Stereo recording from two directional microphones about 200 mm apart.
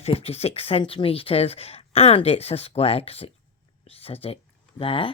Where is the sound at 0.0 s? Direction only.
30° left (ahead or behind).